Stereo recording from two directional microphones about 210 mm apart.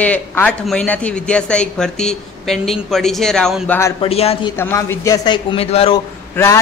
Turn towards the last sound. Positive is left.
turn(degrees=15)  # may be behind; listen again after turning